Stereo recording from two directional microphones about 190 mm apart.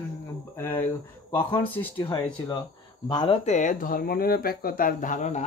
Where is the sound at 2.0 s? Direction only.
25° left (ahead or behind); by 5.4 s 40° left (ahead or behind).